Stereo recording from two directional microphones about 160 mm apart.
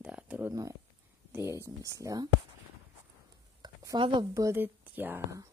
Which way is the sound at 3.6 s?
25° right (ahead or behind).